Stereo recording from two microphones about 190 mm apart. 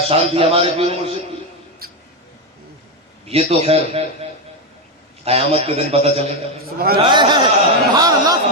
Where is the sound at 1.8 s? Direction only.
50° right (ahead or behind).